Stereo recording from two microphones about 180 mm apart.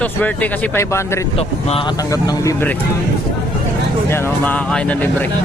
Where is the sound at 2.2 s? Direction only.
20° left (ahead or behind).